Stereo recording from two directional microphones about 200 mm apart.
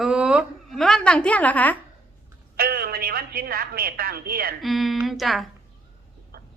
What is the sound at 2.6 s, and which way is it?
A woman's voice, 50° right (ahead or behind).